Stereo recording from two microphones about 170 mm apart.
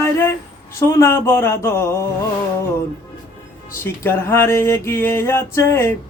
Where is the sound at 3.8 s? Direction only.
15° left (ahead or behind).